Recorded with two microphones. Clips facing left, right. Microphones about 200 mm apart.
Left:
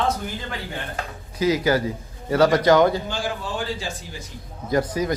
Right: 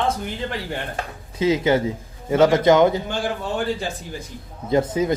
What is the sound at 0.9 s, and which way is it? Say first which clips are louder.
A man's voice: right 1 dB; 25° right (ahead or behind).